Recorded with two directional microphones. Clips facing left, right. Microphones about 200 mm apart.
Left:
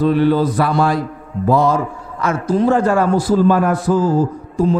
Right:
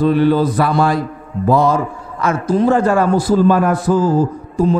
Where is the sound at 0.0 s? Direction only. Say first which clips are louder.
Right 1 dB; 15° right (ahead or behind).